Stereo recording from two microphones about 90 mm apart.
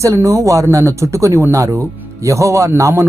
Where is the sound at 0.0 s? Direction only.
35° right (ahead or behind).